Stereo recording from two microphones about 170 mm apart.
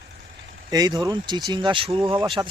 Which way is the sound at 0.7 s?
25° right (ahead or behind).